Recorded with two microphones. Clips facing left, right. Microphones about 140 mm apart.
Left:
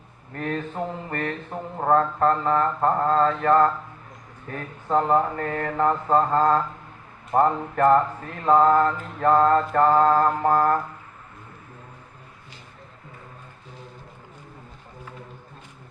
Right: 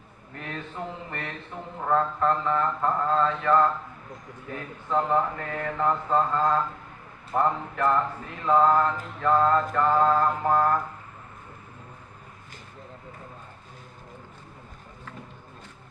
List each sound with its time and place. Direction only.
0.3 s mantra: 45° left (ahead or behind)